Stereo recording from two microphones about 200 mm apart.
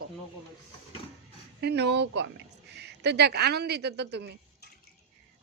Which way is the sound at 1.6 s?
55° right (ahead or behind).